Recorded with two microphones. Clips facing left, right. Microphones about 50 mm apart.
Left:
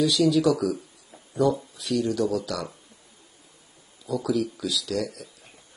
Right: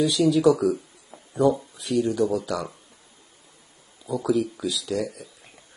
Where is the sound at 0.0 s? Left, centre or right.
Right.